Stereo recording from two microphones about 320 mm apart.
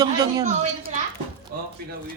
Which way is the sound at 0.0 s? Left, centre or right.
Centre.